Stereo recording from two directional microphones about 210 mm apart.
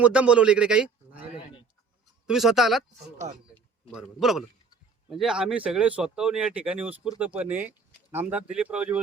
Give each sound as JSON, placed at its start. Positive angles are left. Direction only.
{"t": 0.0, "sound": "a man's voice", "side_deg": -5}
{"t": 3.9, "sound": "speech", "side_deg": 0}